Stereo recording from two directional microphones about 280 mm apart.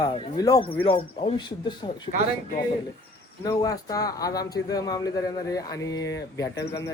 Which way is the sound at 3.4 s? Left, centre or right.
Centre.